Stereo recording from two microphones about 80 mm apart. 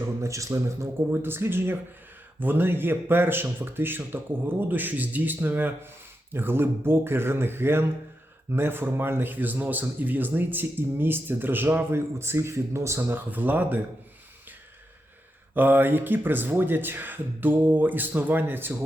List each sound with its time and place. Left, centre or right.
0.0 s speech: right
13.0 s speech: right
15.5 s speech: right